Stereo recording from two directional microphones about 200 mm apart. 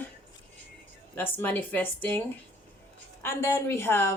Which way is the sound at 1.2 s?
10° left (ahead or behind).